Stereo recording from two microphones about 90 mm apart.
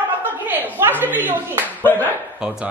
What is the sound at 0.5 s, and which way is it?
Speech, 20° right (ahead or behind).